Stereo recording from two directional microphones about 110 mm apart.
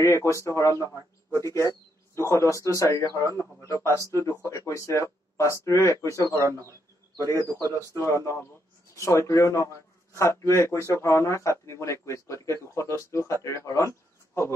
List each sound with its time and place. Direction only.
0.0 s speech: 25° left (ahead or behind)
6.3 s speech: 30° right (ahead or behind)
7.9 s speech: 25° left (ahead or behind)